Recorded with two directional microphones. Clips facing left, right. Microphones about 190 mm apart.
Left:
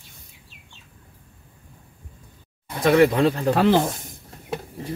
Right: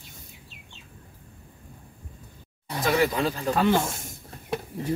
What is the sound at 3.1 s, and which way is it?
Speech, 60° left (ahead or behind).